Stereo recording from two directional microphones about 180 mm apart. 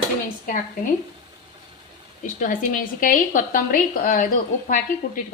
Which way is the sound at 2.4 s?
50° left (ahead or behind).